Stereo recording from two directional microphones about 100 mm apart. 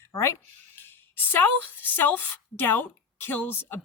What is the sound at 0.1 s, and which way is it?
A woman's voice, 30° left (ahead or behind).